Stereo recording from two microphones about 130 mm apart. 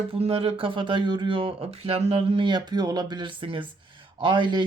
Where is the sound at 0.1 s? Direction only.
45° right (ahead or behind).